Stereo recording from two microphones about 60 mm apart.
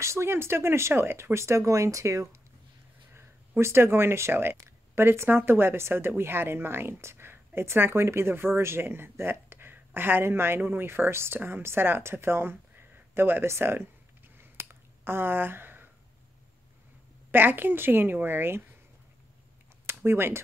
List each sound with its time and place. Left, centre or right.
0.0 s speech: right
3.2 s speech: right
4.6 s speech: right
17.3 s a woman's voice: right
20.1 s a woman's voice: right